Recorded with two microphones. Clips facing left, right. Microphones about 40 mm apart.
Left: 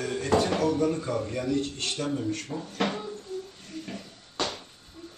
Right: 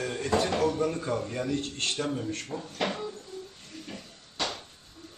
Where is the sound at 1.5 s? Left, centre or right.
Right.